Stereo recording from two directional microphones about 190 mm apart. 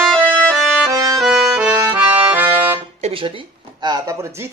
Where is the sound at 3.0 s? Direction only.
30° right (ahead or behind).